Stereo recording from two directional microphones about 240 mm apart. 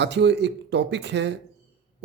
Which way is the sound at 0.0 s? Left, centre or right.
Right.